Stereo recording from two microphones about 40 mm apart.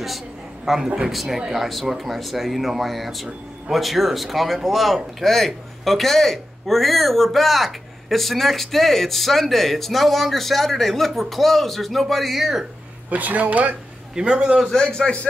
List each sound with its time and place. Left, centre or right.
0.8 s a man's voice: right
1.1 s speech: centre
13.1 s speech: right
14.1 s a man's voice: centre
14.7 s a man's voice: centre